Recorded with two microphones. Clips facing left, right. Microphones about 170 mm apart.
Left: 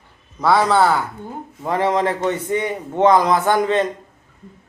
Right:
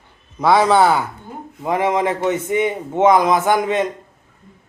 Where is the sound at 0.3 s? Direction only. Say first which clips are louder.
Right 2 dB; 20° right (ahead or behind).